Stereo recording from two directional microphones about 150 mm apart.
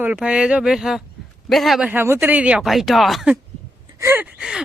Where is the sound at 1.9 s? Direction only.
15° right (ahead or behind).